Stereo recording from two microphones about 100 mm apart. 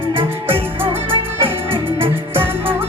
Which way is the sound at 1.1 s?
65° right (ahead or behind).